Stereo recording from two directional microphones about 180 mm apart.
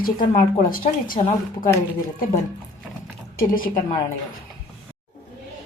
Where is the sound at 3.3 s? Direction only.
50° left (ahead or behind).